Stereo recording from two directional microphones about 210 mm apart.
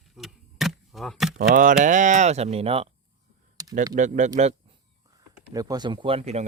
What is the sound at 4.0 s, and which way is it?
Speech, 35° right (ahead or behind).